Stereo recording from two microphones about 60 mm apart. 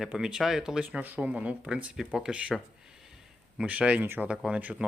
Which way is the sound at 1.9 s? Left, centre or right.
Centre.